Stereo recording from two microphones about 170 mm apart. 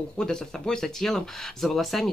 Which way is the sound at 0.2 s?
5° left (ahead or behind).